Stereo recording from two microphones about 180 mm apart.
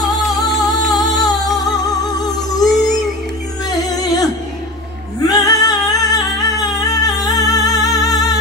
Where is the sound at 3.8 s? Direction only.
20° left (ahead or behind).